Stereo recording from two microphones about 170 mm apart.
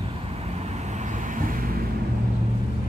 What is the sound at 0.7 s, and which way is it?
Vehicle, 40° right (ahead or behind).